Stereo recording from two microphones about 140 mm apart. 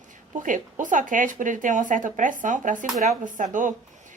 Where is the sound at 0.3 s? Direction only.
65° right (ahead or behind).